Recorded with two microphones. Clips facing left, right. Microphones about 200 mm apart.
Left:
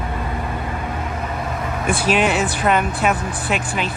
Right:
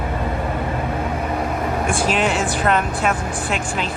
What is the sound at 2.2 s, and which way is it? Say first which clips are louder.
Speech: left 1 dB; 60° left (ahead or behind).